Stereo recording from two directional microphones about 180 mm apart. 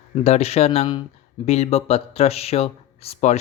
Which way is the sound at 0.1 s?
35° left (ahead or behind).